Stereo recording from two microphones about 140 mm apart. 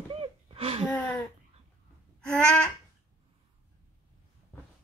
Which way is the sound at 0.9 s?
5° left (ahead or behind).